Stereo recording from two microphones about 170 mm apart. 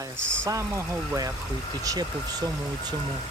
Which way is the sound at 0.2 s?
90° right.